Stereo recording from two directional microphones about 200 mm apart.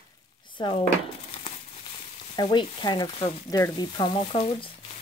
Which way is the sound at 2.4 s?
20° left (ahead or behind).